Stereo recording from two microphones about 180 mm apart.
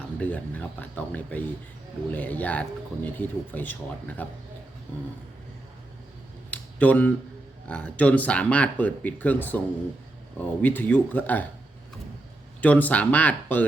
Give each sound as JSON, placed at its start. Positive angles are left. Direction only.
{"t": 0.2, "sound": "speech", "side_deg": 10}
{"t": 6.5, "sound": "a sound", "side_deg": 10}
{"t": 7.7, "sound": "speech", "side_deg": 5}
{"t": 12.6, "sound": "speech", "side_deg": 10}